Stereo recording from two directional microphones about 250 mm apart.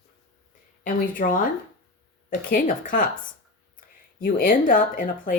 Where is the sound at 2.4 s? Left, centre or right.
Left.